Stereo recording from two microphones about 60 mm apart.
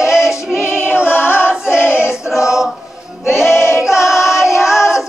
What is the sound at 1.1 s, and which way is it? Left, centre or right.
Choir, left.